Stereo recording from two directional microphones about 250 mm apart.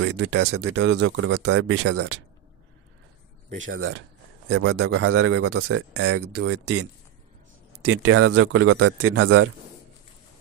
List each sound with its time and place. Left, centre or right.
0.0 s speech: right
3.5 s a man's voice: right
6.5 s a man's voice: right